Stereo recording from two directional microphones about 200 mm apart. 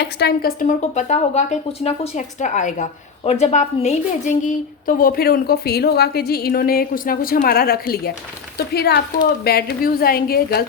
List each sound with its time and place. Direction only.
0.0 s speech: 55° left (ahead or behind)